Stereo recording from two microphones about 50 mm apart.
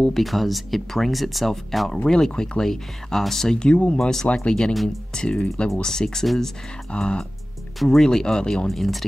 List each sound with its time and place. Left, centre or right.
0.2 s speech: centre
3.5 s speech: left
4.0 s speech: centre
6.9 s speech: centre
8.6 s speech: centre